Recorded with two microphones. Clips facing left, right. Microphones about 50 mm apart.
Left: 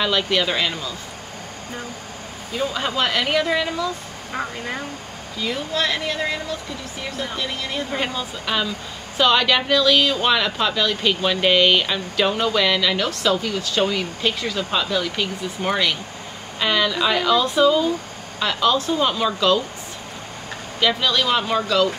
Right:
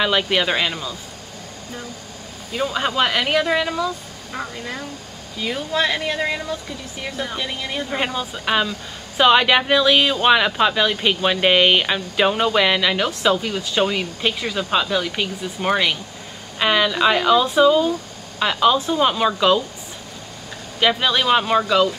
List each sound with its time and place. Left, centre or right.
0.0 s speech: centre
2.5 s speech: centre
4.3 s speech: centre
5.4 s speech: centre
21.0 s speech: centre